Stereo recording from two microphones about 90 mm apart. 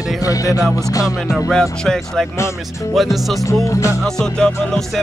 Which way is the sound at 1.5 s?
5° left (ahead or behind).